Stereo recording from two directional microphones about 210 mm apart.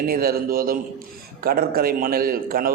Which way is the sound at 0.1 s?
45° right (ahead or behind).